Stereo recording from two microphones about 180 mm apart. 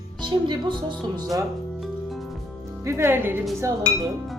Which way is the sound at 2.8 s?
15° right (ahead or behind).